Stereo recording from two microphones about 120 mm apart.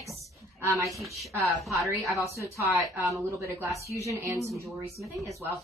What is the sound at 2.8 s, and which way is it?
Speech, 25° right (ahead or behind).